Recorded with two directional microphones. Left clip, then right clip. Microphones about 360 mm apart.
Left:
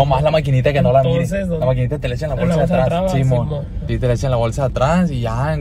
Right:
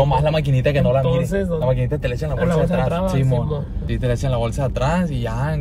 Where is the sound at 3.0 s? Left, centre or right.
Centre.